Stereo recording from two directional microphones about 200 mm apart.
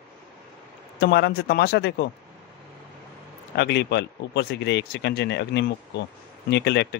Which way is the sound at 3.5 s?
60° left (ahead or behind).